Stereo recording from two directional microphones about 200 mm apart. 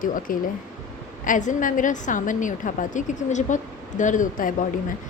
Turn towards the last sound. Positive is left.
turn(degrees=40)  # may be behind; listen again after turning